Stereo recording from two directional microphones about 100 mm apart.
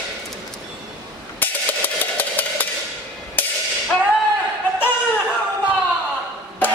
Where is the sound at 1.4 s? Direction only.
20° left (ahead or behind).